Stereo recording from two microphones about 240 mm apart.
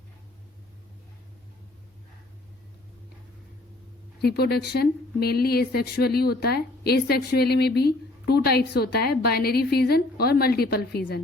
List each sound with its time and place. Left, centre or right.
4.2 s speech: left